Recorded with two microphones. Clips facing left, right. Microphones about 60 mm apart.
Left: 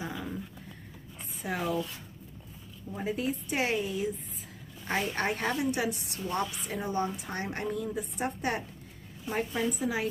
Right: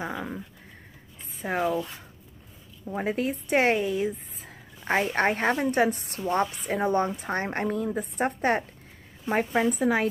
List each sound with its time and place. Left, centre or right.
0.0 s a sound: right
1.4 s speech: right
2.9 s a woman's voice: right
6.5 s a woman's voice: right